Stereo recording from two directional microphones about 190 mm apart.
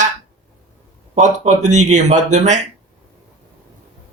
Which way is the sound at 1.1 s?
40° right (ahead or behind).